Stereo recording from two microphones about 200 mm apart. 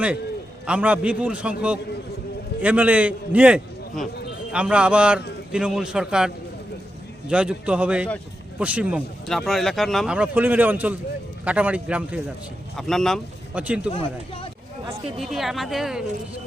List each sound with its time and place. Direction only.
0.7 s a man's voice: 5° right (ahead or behind)
13.9 s speech: 30° left (ahead or behind)
15.2 s speech: centre (ahead or behind)